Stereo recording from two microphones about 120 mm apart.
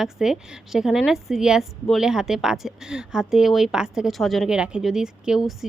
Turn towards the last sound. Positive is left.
turn(degrees=-5)  # may be behind; listen again after turning